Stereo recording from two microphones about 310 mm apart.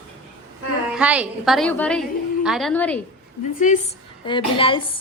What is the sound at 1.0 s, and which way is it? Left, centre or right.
A woman's voice, centre.